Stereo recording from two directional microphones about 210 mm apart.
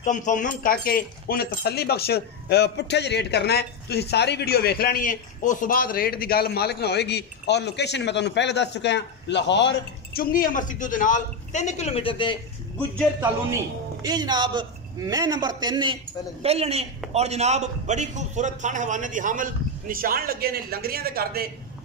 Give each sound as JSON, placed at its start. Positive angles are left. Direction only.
{"t": 0.0, "sound": "speech", "side_deg": 35}
{"t": 14.0, "sound": "a man's voice", "side_deg": -20}